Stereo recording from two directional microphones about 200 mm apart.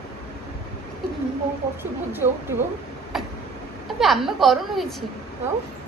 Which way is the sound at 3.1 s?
Centre (ahead or behind).